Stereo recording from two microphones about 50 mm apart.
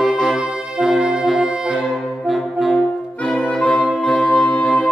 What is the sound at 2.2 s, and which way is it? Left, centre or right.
Brass instrument, centre.